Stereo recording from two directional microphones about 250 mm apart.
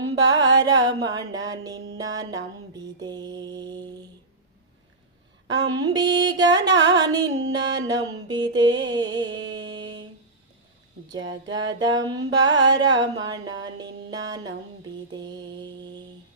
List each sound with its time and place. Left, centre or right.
0.0 s music: centre
2.7 s mantra: centre
5.6 s music: centre
8.3 s mantra: centre
11.2 s a sound: right
11.5 s music: centre
13.0 s a sound: right
15.1 s mantra: centre